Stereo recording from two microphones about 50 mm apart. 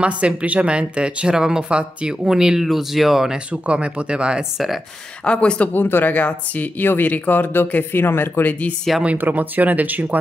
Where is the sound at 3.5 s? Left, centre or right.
Right.